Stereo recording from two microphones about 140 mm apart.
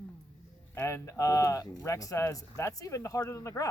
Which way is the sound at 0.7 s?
20° left (ahead or behind).